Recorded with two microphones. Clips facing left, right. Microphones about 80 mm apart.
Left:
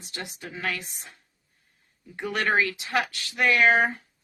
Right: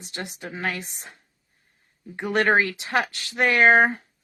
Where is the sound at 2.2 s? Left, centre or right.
Right.